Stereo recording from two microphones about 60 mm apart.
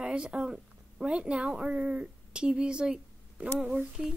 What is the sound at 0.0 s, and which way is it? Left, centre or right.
A child's voice, centre.